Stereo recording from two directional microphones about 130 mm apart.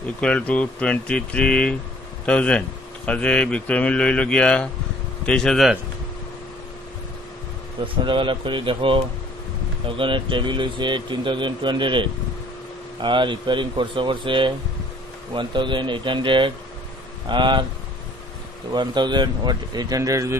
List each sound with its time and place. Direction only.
0.2 s speech: 10° left (ahead or behind)
7.8 s speech: 40° right (ahead or behind)
18.7 s speech: 35° right (ahead or behind)